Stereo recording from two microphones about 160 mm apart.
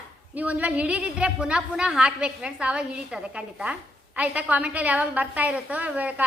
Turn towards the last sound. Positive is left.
turn(degrees=-10)  # may be behind; listen again after turning